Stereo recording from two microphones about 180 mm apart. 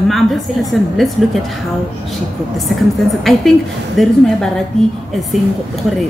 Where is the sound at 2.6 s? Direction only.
Centre (ahead or behind).